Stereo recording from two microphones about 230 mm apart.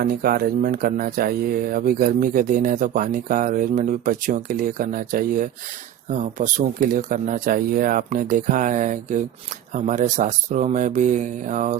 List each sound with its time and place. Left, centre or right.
0.0 s speech: right